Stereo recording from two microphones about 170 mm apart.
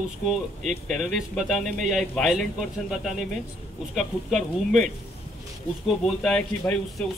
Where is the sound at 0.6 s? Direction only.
45° right (ahead or behind).